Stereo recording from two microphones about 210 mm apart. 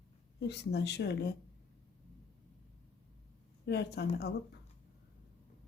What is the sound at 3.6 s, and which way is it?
Speech, 55° left (ahead or behind).